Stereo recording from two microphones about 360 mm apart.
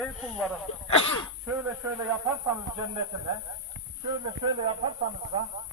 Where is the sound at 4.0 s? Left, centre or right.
Centre.